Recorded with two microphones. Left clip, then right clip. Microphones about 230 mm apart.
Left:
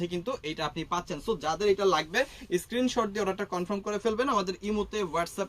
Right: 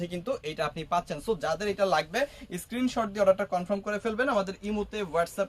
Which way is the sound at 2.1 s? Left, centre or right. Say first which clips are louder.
Left 2 dB; centre.